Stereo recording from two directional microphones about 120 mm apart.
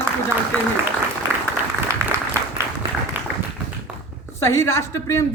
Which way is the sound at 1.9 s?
25° right (ahead or behind).